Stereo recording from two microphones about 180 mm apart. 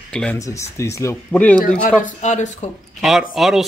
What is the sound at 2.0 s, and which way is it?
Speech, 40° left (ahead or behind).